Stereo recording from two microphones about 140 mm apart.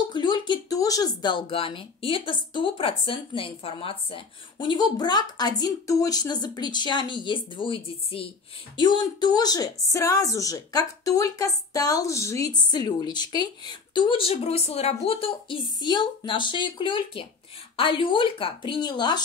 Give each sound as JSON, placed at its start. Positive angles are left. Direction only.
{"t": 0.1, "sound": "a woman's voice", "side_deg": 35}